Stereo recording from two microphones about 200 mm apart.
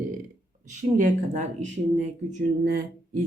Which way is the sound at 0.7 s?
40° right (ahead or behind).